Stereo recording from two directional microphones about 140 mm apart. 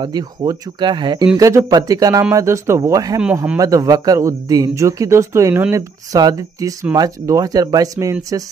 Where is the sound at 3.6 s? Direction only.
25° right (ahead or behind).